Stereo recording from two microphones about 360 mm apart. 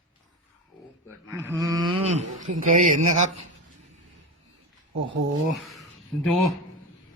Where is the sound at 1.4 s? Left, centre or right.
Centre.